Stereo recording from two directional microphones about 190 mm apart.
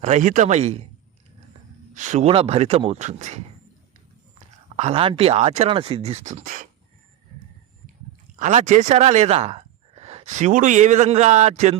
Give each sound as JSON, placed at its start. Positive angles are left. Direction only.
{"t": 0.0, "sound": "speech", "side_deg": -40}
{"t": 1.9, "sound": "speech", "side_deg": -40}
{"t": 4.8, "sound": "speech", "side_deg": -30}
{"t": 8.4, "sound": "speech", "side_deg": -40}